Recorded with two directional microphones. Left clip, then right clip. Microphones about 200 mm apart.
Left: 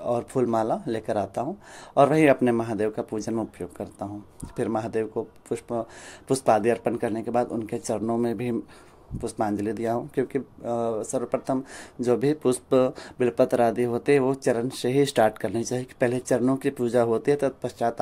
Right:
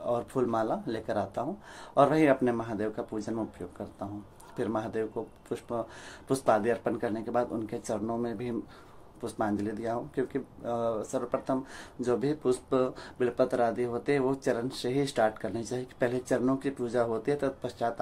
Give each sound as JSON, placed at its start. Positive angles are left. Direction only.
{"t": 0.0, "sound": "speech", "side_deg": 30}